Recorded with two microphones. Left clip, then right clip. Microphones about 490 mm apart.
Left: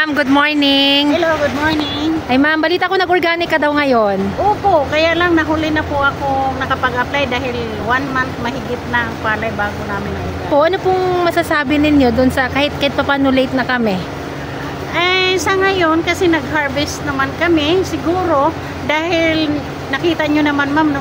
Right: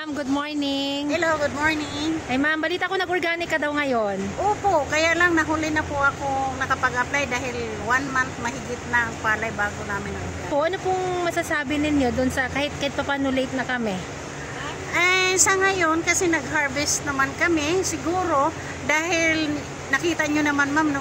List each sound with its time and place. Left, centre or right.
0.0 s speech: right
15.0 s a woman's voice: right